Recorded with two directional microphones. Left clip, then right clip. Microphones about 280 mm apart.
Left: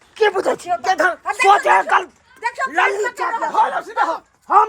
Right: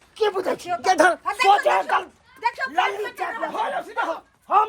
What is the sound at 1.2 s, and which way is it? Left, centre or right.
A man's voice, left.